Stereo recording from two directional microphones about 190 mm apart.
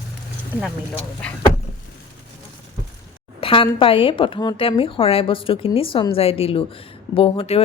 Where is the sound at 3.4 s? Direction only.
30° left (ahead or behind).